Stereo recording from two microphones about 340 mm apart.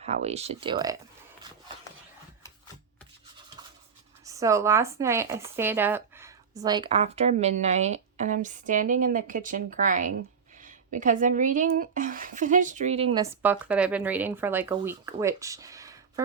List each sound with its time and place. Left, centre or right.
0.0 s speech: centre
4.3 s speech: centre
13.4 s speech: centre